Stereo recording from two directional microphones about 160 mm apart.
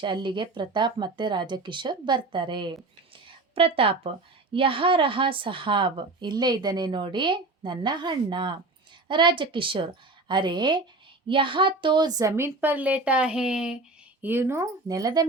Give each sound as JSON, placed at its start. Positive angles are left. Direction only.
{"t": 0.0, "sound": "a woman's voice", "side_deg": -30}
{"t": 12.5, "sound": "speech", "side_deg": -10}